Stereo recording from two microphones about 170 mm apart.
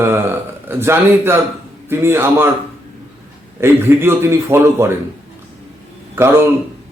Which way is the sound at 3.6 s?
15° right (ahead or behind).